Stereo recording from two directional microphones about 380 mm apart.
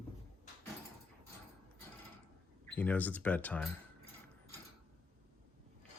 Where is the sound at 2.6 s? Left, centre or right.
Centre.